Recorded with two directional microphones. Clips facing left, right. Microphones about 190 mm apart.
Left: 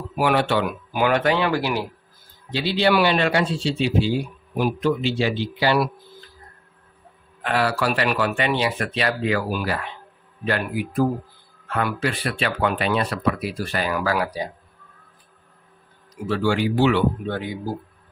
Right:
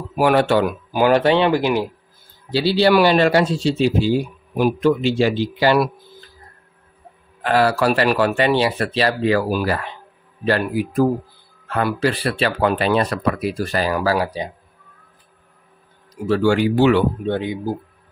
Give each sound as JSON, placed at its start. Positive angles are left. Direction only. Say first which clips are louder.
{"t": 0.2, "sound": "speech", "louder": "right 5 dB", "side_deg": -45}
{"t": 2.5, "sound": "speech", "louder": "right 5 dB", "side_deg": -30}
{"t": 7.4, "sound": "speech", "louder": "right 5 dB", "side_deg": -40}
{"t": 16.3, "sound": "speech", "louder": "right 5 dB", "side_deg": -45}
{"t": 17.3, "sound": "speech", "louder": "right 6 dB", "side_deg": -20}